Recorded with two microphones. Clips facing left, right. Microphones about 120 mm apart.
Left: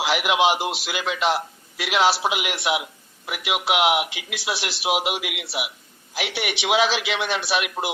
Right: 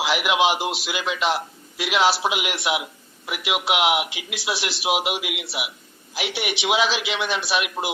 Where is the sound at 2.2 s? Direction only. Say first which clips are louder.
Even; 35° left (ahead or behind).